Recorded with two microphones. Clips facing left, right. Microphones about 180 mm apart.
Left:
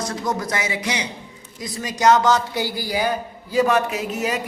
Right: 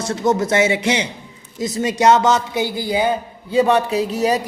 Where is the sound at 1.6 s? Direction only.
25° right (ahead or behind).